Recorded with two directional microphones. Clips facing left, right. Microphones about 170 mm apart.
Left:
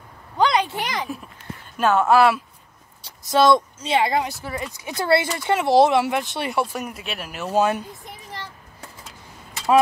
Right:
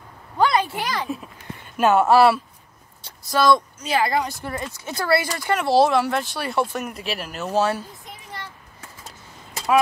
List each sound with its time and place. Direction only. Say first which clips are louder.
0.4 s speech: even; 15° left (ahead or behind)
1.8 s speech: right 1 dB; 5° right (ahead or behind)
3.0 s speech: left 3 dB; 20° left (ahead or behind)
4.3 s speech: even; 5° left (ahead or behind)
4.7 s speech: left 2 dB; 15° left (ahead or behind)
6.5 s speech: right 2 dB; 10° left (ahead or behind)